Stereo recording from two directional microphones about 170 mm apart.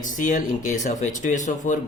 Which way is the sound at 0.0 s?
50° left (ahead or behind).